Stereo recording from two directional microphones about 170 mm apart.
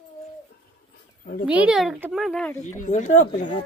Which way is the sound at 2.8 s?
45° left (ahead or behind).